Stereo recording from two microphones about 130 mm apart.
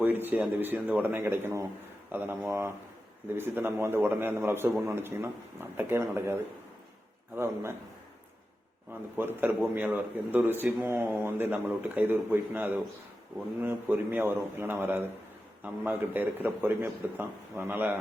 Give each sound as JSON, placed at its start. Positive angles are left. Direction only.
{"t": 0.0, "sound": "a man's voice", "side_deg": -15}
{"t": 7.3, "sound": "a man's voice", "side_deg": -20}
{"t": 9.1, "sound": "speech", "side_deg": -15}